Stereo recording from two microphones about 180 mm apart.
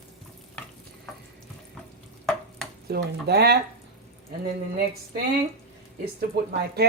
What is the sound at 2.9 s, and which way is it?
Speech, 60° right (ahead or behind).